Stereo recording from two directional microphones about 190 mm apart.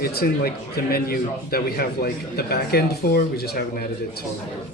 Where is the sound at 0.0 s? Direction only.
55° left (ahead or behind).